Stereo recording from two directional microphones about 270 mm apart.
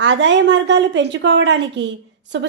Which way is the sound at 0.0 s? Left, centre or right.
Right.